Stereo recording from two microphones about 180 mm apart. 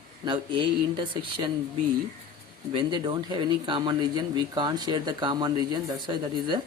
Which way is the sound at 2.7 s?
25° right (ahead or behind).